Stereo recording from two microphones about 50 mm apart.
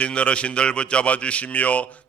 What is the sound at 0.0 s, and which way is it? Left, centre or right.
Speech, left.